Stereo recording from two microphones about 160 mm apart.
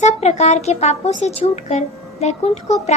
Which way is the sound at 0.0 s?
45° left (ahead or behind).